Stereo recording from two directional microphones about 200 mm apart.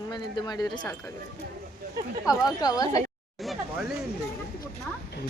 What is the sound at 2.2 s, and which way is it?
Speech, 20° left (ahead or behind).